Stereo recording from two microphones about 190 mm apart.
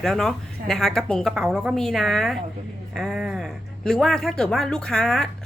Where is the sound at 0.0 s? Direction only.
Centre (ahead or behind).